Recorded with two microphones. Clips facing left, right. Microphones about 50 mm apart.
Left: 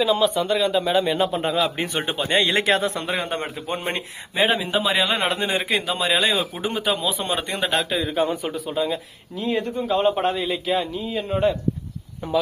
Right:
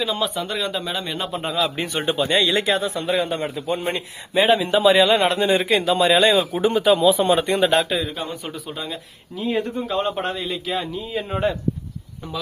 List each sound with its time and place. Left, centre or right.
0.0 s a man's voice: centre
2.1 s speech: left
2.6 s speech: left
3.1 s a man's voice: left
4.4 s a man's voice: centre
8.1 s speech: centre
8.4 s a man's voice: centre